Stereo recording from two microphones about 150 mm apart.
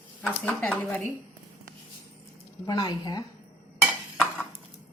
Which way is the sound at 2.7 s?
25° left (ahead or behind).